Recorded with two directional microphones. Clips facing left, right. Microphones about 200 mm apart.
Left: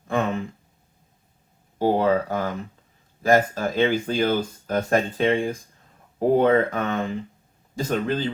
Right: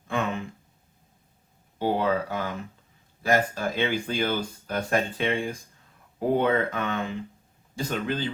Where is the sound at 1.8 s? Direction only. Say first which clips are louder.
Left 5 dB; 45° left (ahead or behind).